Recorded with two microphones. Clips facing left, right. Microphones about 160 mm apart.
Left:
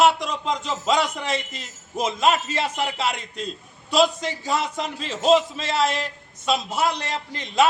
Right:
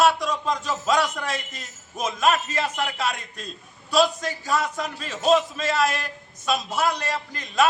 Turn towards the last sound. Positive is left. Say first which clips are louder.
# left 2 dB
turn(degrees=25)  # may be behind; listen again after turning